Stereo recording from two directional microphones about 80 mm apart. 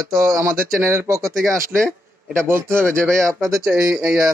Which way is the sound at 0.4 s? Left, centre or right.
Right.